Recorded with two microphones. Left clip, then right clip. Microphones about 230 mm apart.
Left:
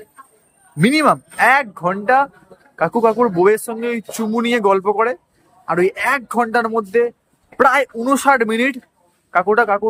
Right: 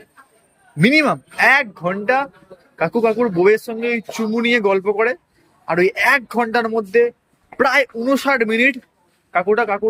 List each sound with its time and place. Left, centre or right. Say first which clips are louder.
0.8 s a man's voice: left 1 dB; centre